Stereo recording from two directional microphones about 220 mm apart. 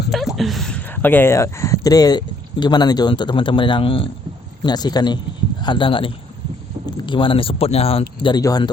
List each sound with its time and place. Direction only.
0.1 s speech: centre (ahead or behind); by 8.7 s 15° left (ahead or behind)